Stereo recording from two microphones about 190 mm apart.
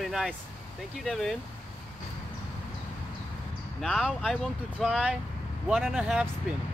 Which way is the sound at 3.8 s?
Centre (ahead or behind).